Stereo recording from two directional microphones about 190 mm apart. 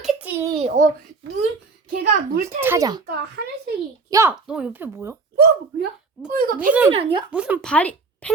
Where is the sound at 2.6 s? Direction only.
15° right (ahead or behind).